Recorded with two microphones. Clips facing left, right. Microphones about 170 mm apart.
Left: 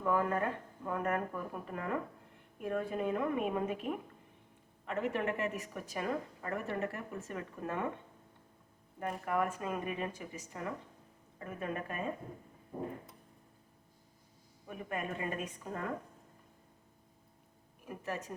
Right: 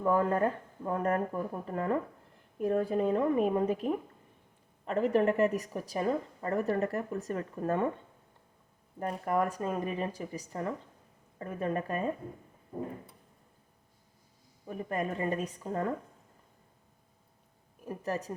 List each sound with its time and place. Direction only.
0.0 s a woman's voice: 35° right (ahead or behind)
9.0 s a woman's voice: 40° right (ahead or behind)
14.7 s a woman's voice: 35° right (ahead or behind)
17.8 s a woman's voice: 35° right (ahead or behind)